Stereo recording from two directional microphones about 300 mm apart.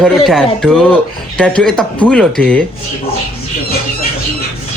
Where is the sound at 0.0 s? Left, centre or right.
Centre.